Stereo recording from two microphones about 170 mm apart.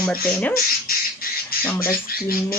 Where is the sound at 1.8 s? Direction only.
60° left (ahead or behind).